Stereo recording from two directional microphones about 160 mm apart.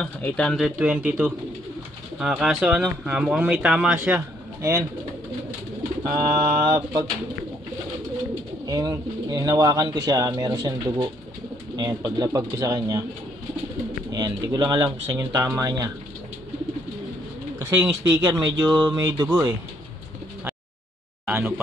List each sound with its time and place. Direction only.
0.0 s speech: 5° left (ahead or behind); by 4.8 s 15° right (ahead or behind)
6.6 s speech: 25° right (ahead or behind)
8.6 s speech: 25° right (ahead or behind)
14.1 s speech: 25° right (ahead or behind)
17.6 s speech: 25° right (ahead or behind)
21.3 s speech: 10° right (ahead or behind)